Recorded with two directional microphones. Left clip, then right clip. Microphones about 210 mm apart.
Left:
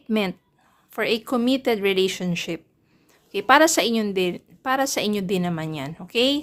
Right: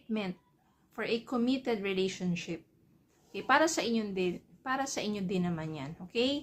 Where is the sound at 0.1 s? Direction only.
55° left (ahead or behind).